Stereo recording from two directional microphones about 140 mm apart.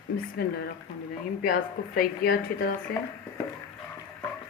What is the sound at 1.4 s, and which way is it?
Speech, 90° left.